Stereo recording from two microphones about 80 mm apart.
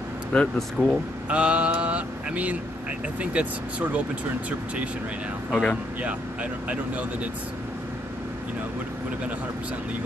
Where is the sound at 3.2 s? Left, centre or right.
Centre.